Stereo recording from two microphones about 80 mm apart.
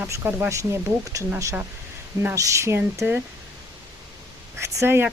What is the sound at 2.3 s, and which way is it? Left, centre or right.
Speech, right.